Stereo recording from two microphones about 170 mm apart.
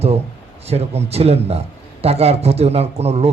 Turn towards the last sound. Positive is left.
turn(degrees=-40)  # may be behind; listen again after turning